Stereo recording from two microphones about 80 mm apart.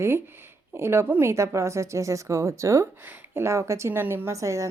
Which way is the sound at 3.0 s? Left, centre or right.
Right.